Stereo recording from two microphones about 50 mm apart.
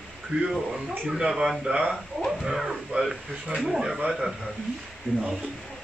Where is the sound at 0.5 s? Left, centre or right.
Centre.